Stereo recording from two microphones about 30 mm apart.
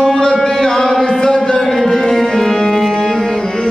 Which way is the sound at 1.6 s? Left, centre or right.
Centre.